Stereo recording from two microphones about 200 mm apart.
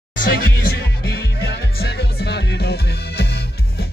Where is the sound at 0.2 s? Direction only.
55° left (ahead or behind).